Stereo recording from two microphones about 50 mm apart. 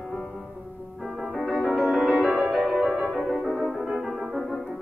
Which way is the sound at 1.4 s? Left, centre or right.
Centre.